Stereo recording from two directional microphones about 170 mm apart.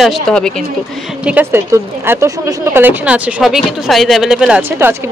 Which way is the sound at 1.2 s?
10° right (ahead or behind).